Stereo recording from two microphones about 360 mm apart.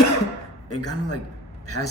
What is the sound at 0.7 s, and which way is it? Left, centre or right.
A man's voice, left.